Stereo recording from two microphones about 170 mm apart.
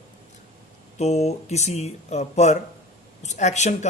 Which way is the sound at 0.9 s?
40° left (ahead or behind).